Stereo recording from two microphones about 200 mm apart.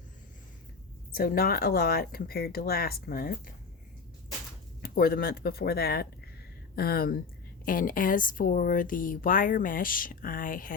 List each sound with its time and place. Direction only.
1.1 s speech: 50° left (ahead or behind)
4.8 s speech: 50° left (ahead or behind)